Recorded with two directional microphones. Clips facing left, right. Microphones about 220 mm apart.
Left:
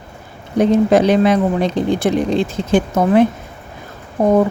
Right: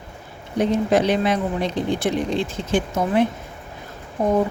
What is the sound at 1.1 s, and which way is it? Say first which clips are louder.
Speech: left 7 dB; 90° left.